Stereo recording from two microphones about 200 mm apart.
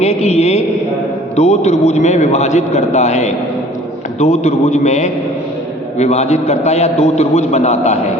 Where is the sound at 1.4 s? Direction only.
35° left (ahead or behind).